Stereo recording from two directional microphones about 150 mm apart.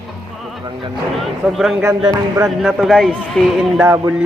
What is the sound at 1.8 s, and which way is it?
Speech, 25° right (ahead or behind).